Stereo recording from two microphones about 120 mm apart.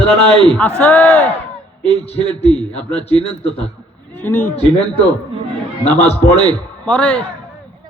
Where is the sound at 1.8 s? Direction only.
60° left (ahead or behind).